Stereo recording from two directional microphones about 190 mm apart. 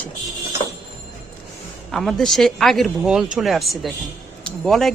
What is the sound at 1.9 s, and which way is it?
Speech, centre (ahead or behind).